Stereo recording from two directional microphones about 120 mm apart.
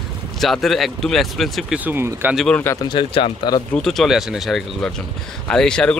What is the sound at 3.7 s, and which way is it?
Speech, 5° left (ahead or behind).